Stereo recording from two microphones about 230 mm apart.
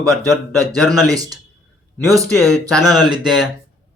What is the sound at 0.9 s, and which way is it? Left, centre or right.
Speech, centre.